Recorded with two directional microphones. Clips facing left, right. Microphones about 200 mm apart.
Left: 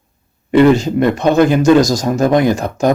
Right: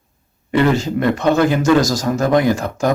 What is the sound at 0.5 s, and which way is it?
Speech, 20° left (ahead or behind).